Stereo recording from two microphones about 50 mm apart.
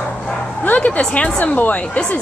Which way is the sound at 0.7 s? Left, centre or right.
Left.